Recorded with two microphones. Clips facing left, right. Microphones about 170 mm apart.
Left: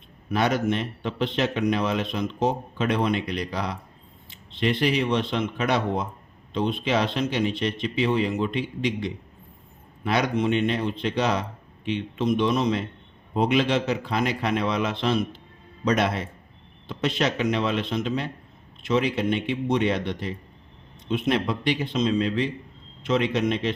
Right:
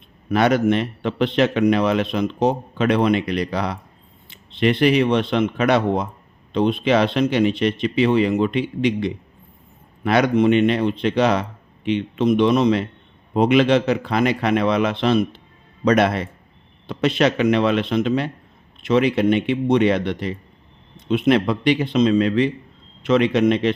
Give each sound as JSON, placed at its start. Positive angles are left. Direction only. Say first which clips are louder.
{"t": 0.3, "sound": "speech", "louder": "right 6 dB", "side_deg": -65}